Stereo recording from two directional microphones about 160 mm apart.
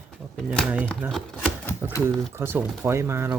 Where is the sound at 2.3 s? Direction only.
15° right (ahead or behind).